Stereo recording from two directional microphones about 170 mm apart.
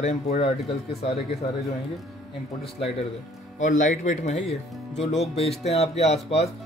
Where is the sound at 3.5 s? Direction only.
45° left (ahead or behind).